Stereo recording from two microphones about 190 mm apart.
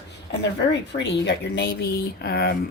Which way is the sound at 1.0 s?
70° left (ahead or behind).